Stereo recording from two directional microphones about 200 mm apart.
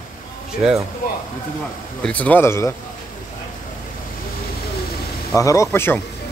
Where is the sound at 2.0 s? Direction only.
5° left (ahead or behind).